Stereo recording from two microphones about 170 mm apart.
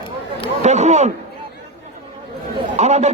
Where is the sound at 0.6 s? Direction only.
40° right (ahead or behind).